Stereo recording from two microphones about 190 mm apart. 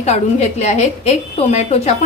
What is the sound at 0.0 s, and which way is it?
A woman's voice, 35° left (ahead or behind).